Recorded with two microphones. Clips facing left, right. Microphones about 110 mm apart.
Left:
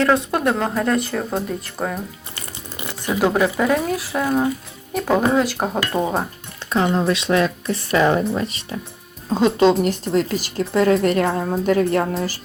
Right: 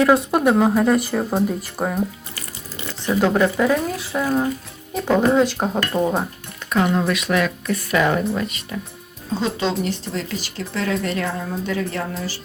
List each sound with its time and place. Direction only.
0.0 s speech: 10° right (ahead or behind)
2.8 s speech: 10° left (ahead or behind)
6.7 s a woman's voice: 30° left (ahead or behind)
9.4 s speech: 55° left (ahead or behind)
11.3 s a woman's voice: 40° left (ahead or behind)